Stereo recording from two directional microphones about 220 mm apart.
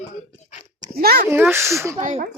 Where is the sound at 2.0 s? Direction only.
35° right (ahead or behind).